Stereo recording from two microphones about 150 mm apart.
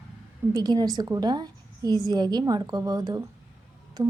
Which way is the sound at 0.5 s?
25° right (ahead or behind).